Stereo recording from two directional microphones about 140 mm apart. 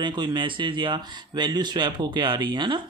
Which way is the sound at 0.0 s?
30° right (ahead or behind).